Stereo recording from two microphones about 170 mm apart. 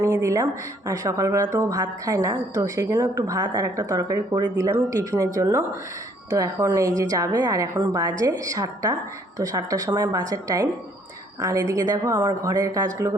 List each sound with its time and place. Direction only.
0.0 s a woman's voice: 15° right (ahead or behind)